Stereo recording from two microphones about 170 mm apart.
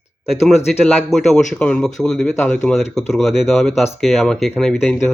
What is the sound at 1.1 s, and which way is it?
Speech, centre (ahead or behind).